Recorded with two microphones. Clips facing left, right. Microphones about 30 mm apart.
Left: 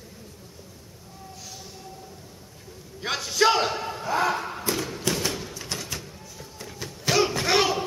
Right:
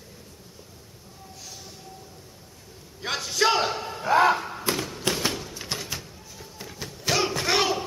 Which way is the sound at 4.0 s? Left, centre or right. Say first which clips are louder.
Right 6 dB; centre.